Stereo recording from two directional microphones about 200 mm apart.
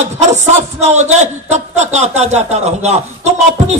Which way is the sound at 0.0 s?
35° right (ahead or behind).